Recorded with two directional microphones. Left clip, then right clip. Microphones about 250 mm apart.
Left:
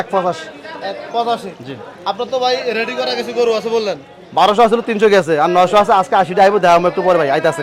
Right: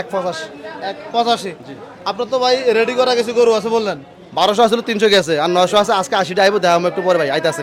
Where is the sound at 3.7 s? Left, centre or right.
Right.